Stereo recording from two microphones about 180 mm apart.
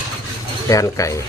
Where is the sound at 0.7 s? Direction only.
20° left (ahead or behind).